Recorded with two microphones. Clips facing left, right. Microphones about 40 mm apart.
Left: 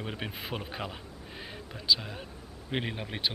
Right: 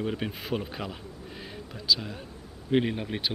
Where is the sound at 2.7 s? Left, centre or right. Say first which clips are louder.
Right 8 dB; centre.